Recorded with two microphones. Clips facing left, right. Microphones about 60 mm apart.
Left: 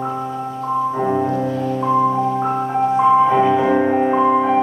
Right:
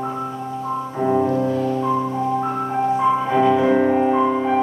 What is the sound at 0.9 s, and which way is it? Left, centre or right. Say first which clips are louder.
Music: even; centre.